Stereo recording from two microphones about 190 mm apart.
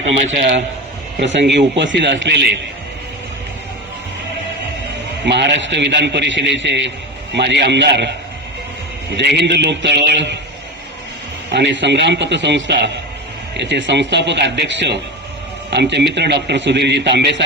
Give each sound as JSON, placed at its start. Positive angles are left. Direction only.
{"t": 1.2, "sound": "speech", "side_deg": -70}
{"t": 5.2, "sound": "speech", "side_deg": -65}
{"t": 9.1, "sound": "speech", "side_deg": -60}
{"t": 11.5, "sound": "speech", "side_deg": -70}